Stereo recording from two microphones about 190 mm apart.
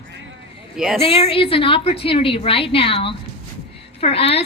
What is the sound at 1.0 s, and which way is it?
A woman's voice, 30° left (ahead or behind).